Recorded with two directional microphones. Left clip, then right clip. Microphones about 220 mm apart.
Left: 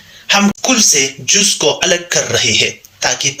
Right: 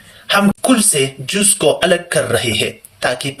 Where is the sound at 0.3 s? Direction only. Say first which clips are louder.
Left 1 dB; 15° right (ahead or behind).